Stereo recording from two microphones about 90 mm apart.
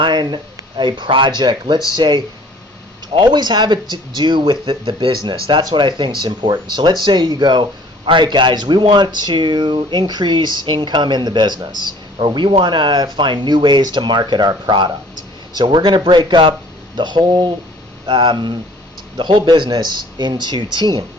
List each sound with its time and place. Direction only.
0.0 s a man's voice: 55° right (ahead or behind); by 5.1 s 80° right
5.2 s a man's voice: 60° right (ahead or behind)
18.0 s a man's voice: 65° right (ahead or behind)